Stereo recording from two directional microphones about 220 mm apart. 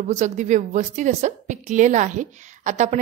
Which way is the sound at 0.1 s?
30° right (ahead or behind).